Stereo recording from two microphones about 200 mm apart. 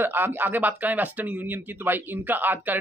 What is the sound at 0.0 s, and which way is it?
Speech, 10° right (ahead or behind).